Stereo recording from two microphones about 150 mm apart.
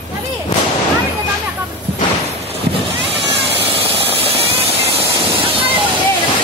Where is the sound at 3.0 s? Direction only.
40° right (ahead or behind).